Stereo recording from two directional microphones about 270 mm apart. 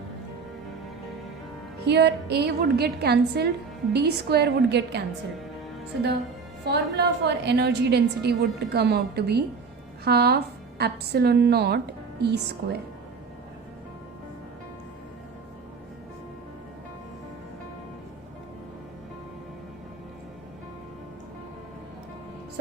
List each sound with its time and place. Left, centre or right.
1.9 s a woman's voice: right
6.7 s a woman's voice: right